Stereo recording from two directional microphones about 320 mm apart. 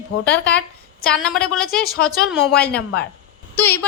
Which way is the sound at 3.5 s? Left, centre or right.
Centre.